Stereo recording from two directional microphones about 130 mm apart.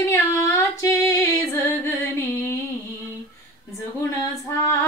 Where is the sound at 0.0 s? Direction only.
20° left (ahead or behind).